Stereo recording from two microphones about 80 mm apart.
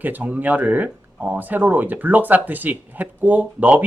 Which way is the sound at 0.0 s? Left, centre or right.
Right.